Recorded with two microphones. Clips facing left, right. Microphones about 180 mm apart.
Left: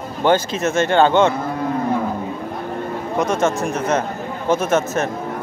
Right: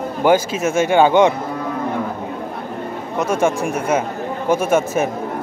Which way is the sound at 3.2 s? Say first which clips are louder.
Right 1 dB; 10° right (ahead or behind).